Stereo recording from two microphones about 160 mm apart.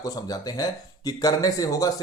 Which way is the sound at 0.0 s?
25° left (ahead or behind).